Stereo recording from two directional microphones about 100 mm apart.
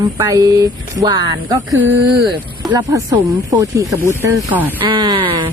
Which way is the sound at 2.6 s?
35° right (ahead or behind).